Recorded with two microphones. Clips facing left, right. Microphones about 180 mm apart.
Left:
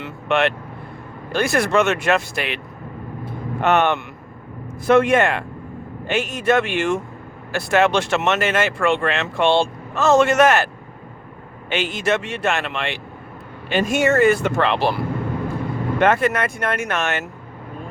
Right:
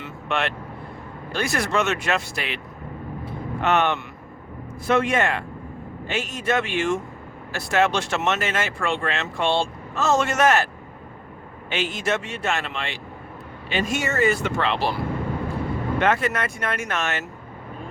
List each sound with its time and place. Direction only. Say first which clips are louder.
0.0 s speech: left 7 dB; 65° left (ahead or behind)
3.6 s speech: left 4 dB; 50° left (ahead or behind)
11.7 s speech: left 4 dB; 65° left (ahead or behind)
13.7 s speech: left 7 dB; 50° left (ahead or behind)
16.0 s speech: left 5 dB; 50° left (ahead or behind)